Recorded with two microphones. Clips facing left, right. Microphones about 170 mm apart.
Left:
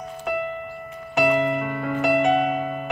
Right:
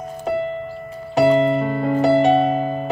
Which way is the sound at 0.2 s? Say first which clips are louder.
Right 5 dB; 30° right (ahead or behind).